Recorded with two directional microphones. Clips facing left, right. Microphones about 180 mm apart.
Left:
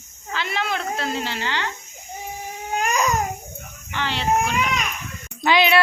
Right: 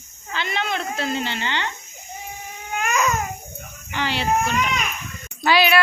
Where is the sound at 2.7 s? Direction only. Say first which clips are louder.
Left 1 dB; 35° left (ahead or behind).